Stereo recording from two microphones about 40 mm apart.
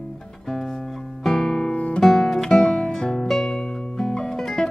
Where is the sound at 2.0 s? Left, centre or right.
Centre.